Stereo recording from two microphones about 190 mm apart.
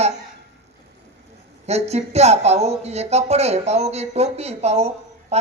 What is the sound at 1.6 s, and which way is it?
A woman's voice, 35° right (ahead or behind).